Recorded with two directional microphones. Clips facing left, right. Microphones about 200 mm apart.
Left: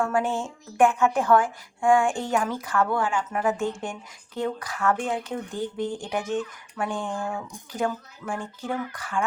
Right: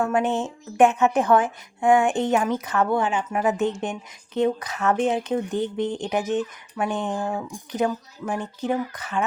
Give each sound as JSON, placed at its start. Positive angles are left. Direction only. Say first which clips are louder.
{"t": 0.0, "sound": "a woman's voice", "louder": "right 3 dB", "side_deg": -20}